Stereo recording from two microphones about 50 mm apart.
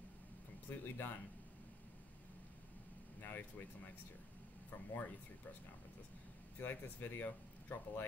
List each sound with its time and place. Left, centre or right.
0.7 s speech: left
3.2 s speech: left
4.6 s speech: left
6.6 s speech: left